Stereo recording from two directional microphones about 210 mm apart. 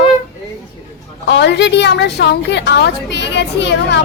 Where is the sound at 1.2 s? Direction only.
55° left (ahead or behind).